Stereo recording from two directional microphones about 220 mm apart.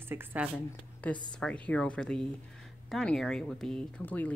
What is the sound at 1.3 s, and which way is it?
Speech, 5° left (ahead or behind).